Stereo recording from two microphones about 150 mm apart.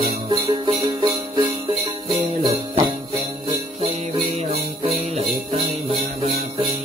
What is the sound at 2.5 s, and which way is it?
Jingle bell, 45° right (ahead or behind).